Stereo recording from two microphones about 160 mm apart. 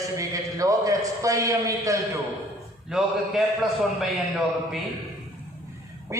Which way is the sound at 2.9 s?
5° right (ahead or behind).